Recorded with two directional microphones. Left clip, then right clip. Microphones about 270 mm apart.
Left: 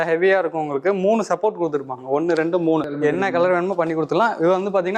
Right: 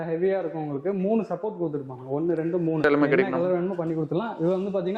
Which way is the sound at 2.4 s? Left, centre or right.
Left.